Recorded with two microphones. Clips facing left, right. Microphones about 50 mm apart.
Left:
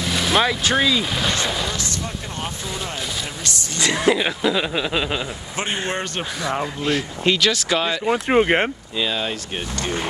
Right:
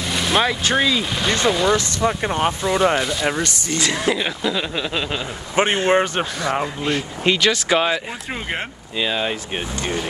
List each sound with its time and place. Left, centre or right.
0.0 s speech: centre
3.8 s speech: centre
5.9 s speech: right
6.5 s speech: centre
8.3 s speech: left
8.9 s speech: centre